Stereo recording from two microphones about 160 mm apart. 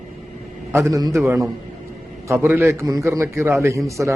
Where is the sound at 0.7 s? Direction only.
20° right (ahead or behind).